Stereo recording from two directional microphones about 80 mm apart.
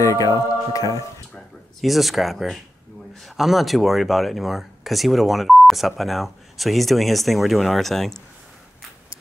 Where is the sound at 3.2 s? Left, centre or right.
Centre.